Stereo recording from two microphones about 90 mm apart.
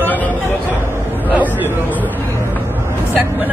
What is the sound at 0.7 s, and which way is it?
A woman's voice, 30° right (ahead or behind).